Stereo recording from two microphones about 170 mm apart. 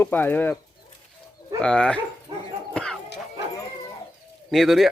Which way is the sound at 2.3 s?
25° right (ahead or behind).